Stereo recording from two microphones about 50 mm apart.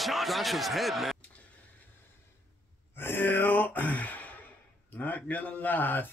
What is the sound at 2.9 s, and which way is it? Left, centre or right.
Gasp, left.